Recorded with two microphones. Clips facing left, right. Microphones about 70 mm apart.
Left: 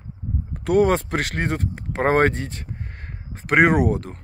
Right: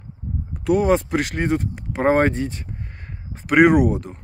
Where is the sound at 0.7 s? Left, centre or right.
Left.